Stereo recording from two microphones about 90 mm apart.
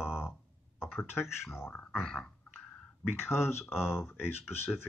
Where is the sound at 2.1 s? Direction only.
10° left (ahead or behind).